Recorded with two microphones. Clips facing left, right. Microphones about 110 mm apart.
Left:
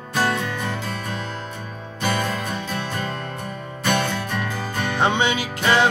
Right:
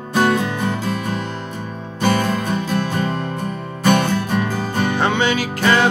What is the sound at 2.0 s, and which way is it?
Music, 35° right (ahead or behind).